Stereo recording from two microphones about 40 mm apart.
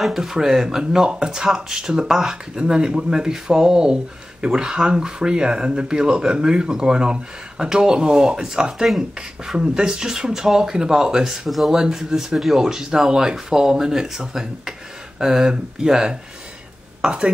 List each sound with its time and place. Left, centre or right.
0.2 s speech: centre
11.4 s speech: centre
11.7 s speech: centre